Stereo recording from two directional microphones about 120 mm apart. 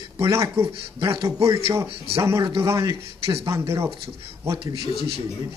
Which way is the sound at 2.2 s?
25° right (ahead or behind).